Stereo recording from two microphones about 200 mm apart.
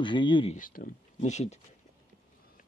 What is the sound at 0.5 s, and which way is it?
Speech, 40° left (ahead or behind).